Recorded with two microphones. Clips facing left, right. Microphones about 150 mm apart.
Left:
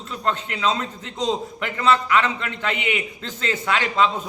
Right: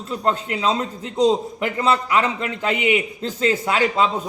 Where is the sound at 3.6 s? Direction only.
40° right (ahead or behind).